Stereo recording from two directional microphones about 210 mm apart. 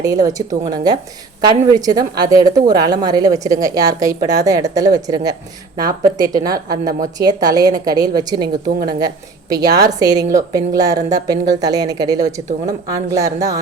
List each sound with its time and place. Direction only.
0.0 s a woman's voice: 15° right (ahead or behind)